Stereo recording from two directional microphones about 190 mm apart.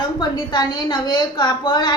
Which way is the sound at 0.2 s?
20° left (ahead or behind).